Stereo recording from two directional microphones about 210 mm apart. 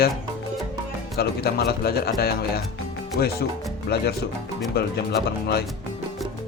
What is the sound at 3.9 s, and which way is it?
Speech, 50° left (ahead or behind).